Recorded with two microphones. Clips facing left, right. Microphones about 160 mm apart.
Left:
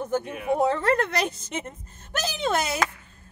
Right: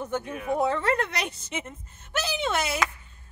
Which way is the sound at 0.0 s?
35° left (ahead or behind).